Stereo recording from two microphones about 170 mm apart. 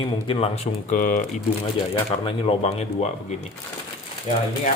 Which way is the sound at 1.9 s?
30° left (ahead or behind).